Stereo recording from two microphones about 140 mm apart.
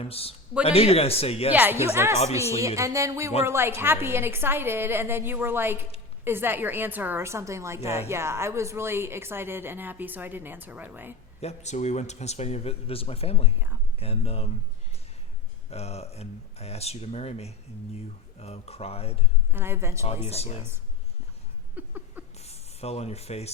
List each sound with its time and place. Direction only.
0.0 s speech: 45° left (ahead or behind)
1.5 s a woman's voice: 15° right (ahead or behind)
2.6 s a sound: 20° right (ahead or behind)
3.4 s a woman's voice: 15° right (ahead or behind)
11.3 s speech: 50° left (ahead or behind)
15.7 s speech: 50° left (ahead or behind)
19.5 s a woman's voice: 15° right (ahead or behind)
20.2 s speech: 50° left (ahead or behind)
21.8 s a sound: 15° right (ahead or behind)
22.4 s speech: 50° left (ahead or behind)